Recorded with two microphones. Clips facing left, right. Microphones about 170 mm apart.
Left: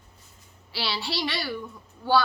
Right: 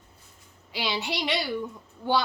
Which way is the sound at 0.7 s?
15° right (ahead or behind).